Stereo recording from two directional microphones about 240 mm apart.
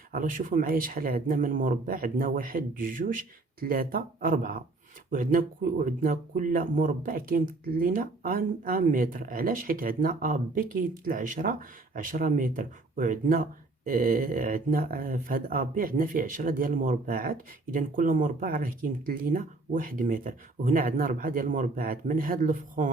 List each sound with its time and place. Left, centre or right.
0.1 s speech: right